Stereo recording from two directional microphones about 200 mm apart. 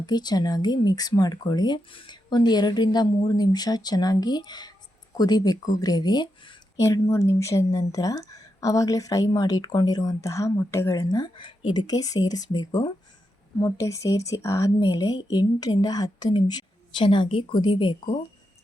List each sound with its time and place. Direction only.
0.0 s a woman's voice: 20° left (ahead or behind)